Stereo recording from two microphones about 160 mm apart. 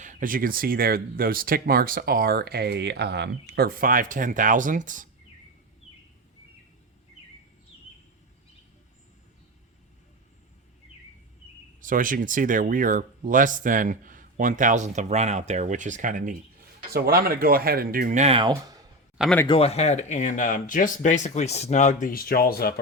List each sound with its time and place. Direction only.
0.0 s speech: 55° right (ahead or behind)
11.8 s speech: 55° right (ahead or behind)
16.9 s speech: 70° right (ahead or behind); by 18.3 s 50° right (ahead or behind)
18.3 s speech: 25° right (ahead or behind)
19.5 s speech: 40° left (ahead or behind); by 22.7 s 70° left (ahead or behind)